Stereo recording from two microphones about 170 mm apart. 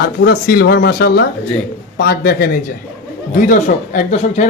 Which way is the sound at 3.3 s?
50° left (ahead or behind).